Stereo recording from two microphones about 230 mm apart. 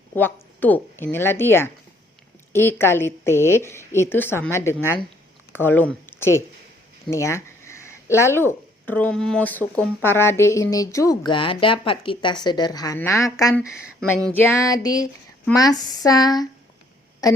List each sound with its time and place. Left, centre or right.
0.1 s speech: centre